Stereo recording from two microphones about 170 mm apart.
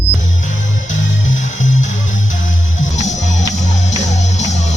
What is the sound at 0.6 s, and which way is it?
Music, 90° left.